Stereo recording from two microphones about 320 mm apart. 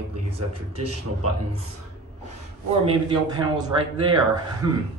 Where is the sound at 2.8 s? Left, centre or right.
Centre.